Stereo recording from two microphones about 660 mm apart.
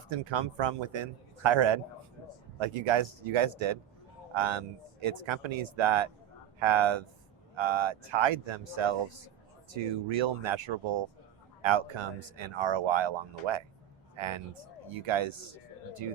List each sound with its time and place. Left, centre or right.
0.1 s speech: right